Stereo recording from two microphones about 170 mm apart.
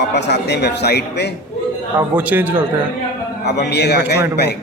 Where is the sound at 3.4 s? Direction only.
80° left.